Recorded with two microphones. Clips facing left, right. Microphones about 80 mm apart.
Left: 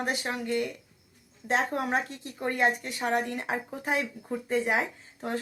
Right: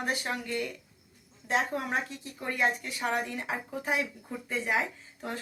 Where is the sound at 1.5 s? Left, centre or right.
Left.